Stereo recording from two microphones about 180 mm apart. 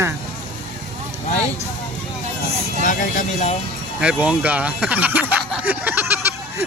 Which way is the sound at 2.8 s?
45° left (ahead or behind).